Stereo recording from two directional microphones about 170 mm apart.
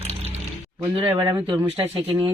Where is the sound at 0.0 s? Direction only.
35° right (ahead or behind).